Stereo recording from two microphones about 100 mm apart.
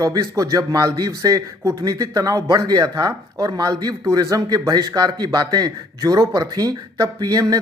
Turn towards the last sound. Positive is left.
turn(degrees=-40)  # may be behind; listen again after turning